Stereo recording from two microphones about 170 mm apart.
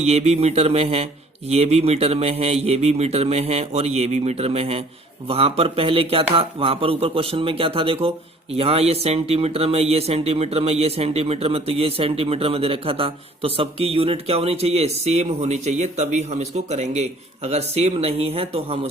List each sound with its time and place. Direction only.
0.0 s speech: 40° right (ahead or behind)